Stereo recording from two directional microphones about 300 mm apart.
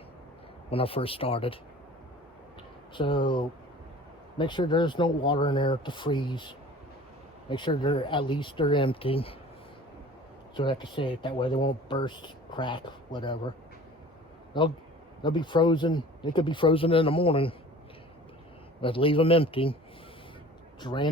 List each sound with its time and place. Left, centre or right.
0.7 s speech: centre
2.9 s speech: centre
7.5 s speech: centre
10.6 s speech: centre
14.5 s speech: centre
18.8 s speech: centre
20.8 s speech: centre